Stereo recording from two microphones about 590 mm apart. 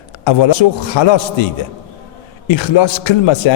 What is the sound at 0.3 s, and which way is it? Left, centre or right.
Speech, left.